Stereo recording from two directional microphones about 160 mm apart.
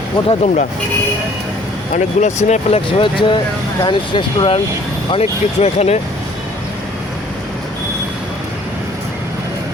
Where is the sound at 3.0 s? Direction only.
30° left (ahead or behind).